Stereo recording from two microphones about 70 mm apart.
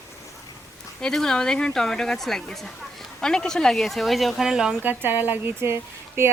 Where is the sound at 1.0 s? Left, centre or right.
Centre.